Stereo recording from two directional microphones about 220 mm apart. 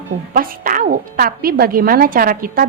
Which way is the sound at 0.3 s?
40° right (ahead or behind).